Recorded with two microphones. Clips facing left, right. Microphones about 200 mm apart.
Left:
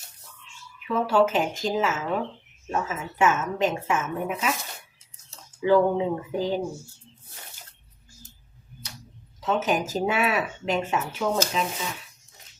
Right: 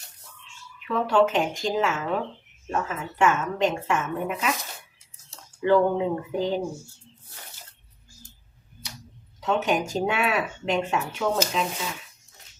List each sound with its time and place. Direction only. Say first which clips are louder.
0.9 s speech: even; 5° left (ahead or behind)
5.6 s speech: even; 5° left (ahead or behind)
9.4 s speech: even; centre (ahead or behind)